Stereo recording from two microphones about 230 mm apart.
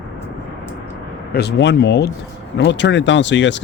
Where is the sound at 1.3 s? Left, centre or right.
Left.